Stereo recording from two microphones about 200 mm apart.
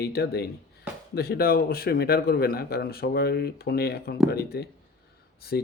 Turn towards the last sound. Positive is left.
turn(degrees=50)  # may be behind; listen again after turning